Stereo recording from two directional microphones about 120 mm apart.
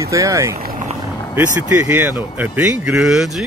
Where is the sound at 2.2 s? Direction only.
15° right (ahead or behind).